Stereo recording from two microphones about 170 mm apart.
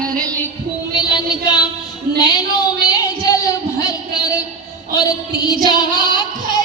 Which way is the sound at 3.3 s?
20° left (ahead or behind).